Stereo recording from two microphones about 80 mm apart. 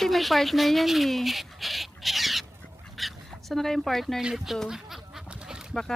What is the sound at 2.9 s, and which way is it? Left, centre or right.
Goose, centre.